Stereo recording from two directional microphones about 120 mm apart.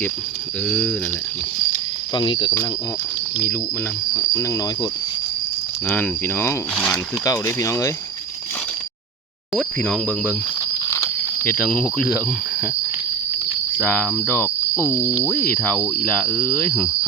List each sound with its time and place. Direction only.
0.7 s cricket: 10° left (ahead or behind)
2.1 s speech: 40° left (ahead or behind)
4.1 s speech: 25° left (ahead or behind)
5.9 s speech: 15° left (ahead or behind)
6.7 s cricket: 10° left (ahead or behind)
7.3 s speech: 25° left (ahead or behind)
9.6 s cricket: 5° left (ahead or behind)
10.9 s a sound: 25° left (ahead or behind)
11.5 s cricket: 10° left (ahead or behind)
13.8 s cricket: 15° left (ahead or behind)